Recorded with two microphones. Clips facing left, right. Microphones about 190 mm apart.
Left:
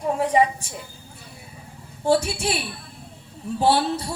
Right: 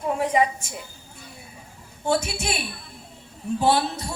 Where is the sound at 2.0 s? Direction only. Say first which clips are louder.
Left 4 dB; 35° left (ahead or behind).